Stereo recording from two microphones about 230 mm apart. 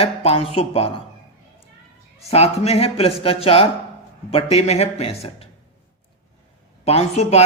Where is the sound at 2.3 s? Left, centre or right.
Left.